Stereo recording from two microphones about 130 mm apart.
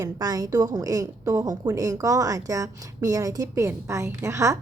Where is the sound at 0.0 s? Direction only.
30° right (ahead or behind).